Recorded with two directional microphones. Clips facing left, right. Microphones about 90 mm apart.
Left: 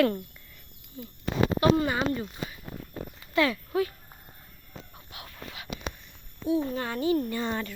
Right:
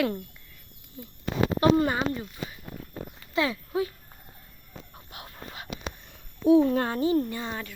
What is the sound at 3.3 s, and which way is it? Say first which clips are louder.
Speech: left 2 dB; 25° right (ahead or behind).